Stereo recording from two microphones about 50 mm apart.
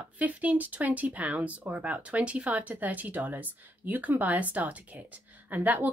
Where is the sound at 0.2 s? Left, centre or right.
Right.